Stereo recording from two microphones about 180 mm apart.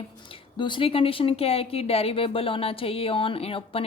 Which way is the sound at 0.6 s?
30° left (ahead or behind).